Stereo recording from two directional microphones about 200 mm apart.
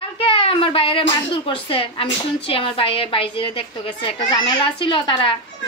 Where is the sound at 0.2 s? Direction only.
30° left (ahead or behind).